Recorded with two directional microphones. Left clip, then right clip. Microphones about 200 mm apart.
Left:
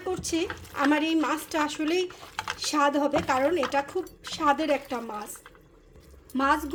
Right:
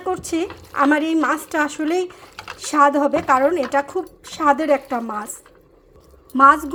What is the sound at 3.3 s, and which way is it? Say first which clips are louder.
Speech: right 8 dB; 10° right (ahead or behind).